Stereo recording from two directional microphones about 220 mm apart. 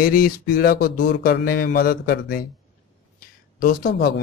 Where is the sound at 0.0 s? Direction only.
40° left (ahead or behind).